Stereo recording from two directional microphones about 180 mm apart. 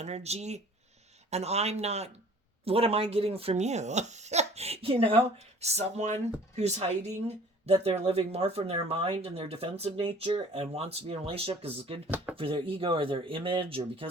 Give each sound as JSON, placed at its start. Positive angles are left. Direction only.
{"t": 0.0, "sound": "speech", "side_deg": -35}
{"t": 12.0, "sound": "speech", "side_deg": -10}
{"t": 12.4, "sound": "speech", "side_deg": -30}